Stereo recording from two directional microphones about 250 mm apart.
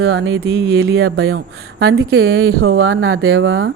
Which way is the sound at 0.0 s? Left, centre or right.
Right.